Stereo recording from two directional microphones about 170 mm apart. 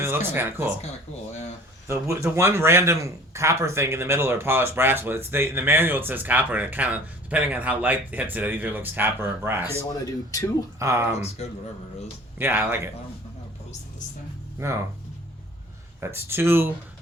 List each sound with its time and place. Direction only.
0.0 s speech: 15° right (ahead or behind)
1.9 s speech: 15° right (ahead or behind)
10.8 s speech: 15° right (ahead or behind)
12.4 s speech: 10° right (ahead or behind)
14.6 s speech: 20° right (ahead or behind)
16.0 s speech: 15° right (ahead or behind)